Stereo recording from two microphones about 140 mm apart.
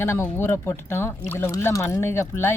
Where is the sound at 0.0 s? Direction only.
20° left (ahead or behind).